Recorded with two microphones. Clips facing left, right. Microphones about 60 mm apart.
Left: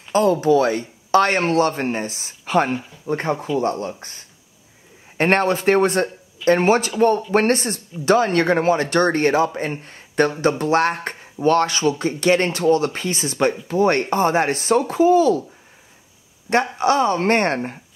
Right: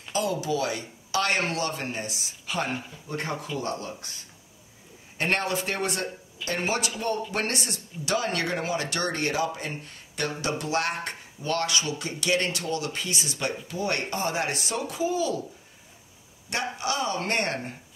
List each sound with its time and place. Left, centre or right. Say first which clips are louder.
0.1 s speech: left 11 dB; left
16.7 s speech: left 9 dB; left